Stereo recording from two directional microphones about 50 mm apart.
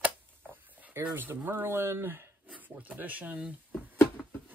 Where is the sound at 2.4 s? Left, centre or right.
Right.